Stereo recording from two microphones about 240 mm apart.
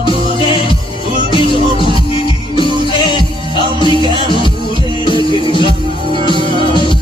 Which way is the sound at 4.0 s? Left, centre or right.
Centre.